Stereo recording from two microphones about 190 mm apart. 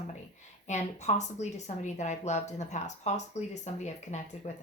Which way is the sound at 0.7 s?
40° left (ahead or behind).